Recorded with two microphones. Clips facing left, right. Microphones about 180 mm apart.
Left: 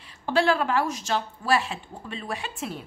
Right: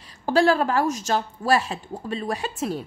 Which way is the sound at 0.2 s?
40° right (ahead or behind).